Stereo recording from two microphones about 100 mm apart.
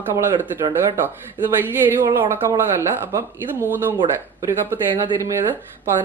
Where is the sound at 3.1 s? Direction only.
25° right (ahead or behind).